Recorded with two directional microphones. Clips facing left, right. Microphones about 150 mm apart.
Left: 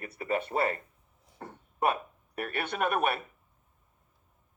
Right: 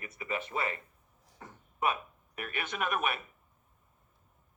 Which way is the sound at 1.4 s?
50° left (ahead or behind).